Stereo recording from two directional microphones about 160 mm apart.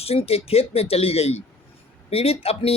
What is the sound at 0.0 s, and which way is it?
Speech, 40° left (ahead or behind).